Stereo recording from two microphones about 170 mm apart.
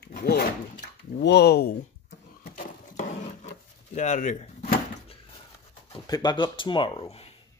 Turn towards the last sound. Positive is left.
turn(degrees=35)  # may be behind; listen again after turning